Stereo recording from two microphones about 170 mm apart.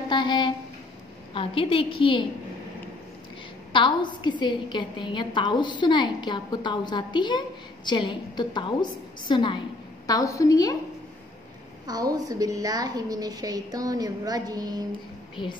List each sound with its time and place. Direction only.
0.1 s a sound: 25° left (ahead or behind)
1.3 s a woman's voice: 30° left (ahead or behind)
3.7 s a woman's voice: 30° left (ahead or behind)
11.8 s a woman's voice: 20° right (ahead or behind)
15.4 s a woman's voice: 30° left (ahead or behind)